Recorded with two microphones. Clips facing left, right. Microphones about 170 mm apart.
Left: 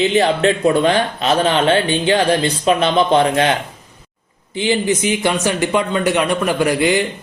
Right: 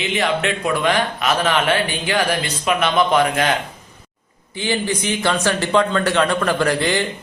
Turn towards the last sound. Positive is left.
turn(degrees=15)  # may be behind; listen again after turning